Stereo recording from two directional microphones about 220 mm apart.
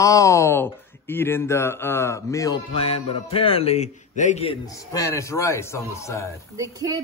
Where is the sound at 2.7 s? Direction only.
25° left (ahead or behind).